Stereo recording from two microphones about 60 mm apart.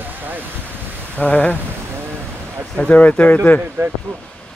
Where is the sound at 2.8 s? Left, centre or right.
Left.